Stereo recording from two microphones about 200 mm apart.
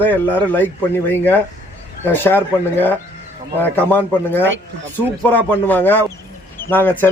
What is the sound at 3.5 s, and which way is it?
Speech, 10° left (ahead or behind).